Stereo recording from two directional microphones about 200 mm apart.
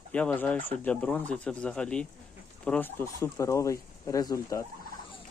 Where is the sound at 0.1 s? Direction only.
5° left (ahead or behind).